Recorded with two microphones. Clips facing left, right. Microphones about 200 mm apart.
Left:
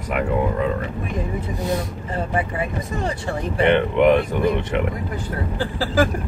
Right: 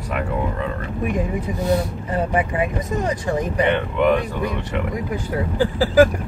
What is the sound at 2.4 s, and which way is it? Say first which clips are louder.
Speech: right 3 dB; 15° right (ahead or behind).